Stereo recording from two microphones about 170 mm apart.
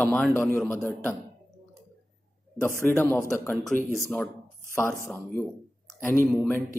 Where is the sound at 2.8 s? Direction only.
15° left (ahead or behind).